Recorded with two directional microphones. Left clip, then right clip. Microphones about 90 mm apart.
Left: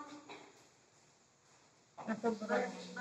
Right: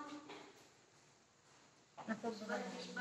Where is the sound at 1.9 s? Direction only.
30° left (ahead or behind).